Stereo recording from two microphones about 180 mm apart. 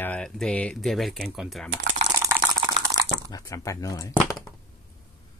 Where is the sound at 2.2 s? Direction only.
15° right (ahead or behind).